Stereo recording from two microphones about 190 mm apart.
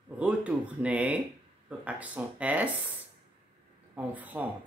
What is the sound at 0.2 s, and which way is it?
Speech, 5° right (ahead or behind).